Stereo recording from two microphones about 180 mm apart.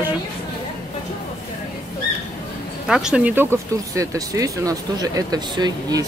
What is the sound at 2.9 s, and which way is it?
Speech, 5° right (ahead or behind).